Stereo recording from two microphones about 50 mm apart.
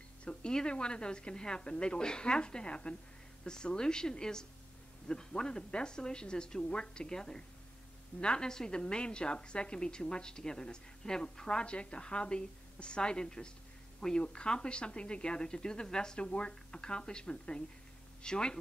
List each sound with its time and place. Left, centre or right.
0.2 s a woman's voice: left